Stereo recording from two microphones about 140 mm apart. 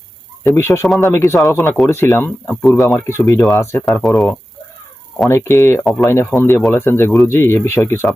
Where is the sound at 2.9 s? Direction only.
15° left (ahead or behind).